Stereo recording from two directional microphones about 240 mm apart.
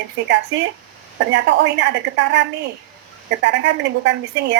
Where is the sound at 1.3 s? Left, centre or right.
Right.